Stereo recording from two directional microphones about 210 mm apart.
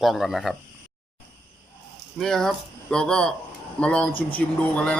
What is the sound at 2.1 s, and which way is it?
Speech, centre (ahead or behind).